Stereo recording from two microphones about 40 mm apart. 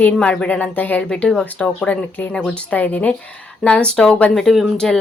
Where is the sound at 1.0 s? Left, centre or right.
Left.